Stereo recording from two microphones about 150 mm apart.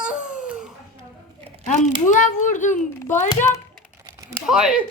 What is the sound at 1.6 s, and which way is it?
Speech, 55° left (ahead or behind).